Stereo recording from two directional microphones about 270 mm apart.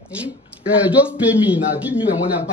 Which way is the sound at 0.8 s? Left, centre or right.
Centre.